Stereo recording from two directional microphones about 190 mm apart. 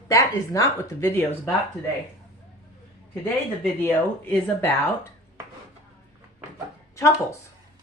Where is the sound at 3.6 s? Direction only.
5° left (ahead or behind).